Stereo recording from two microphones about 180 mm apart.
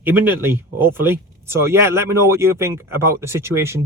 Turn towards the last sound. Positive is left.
turn(degrees=-15)  # may be behind; listen again after turning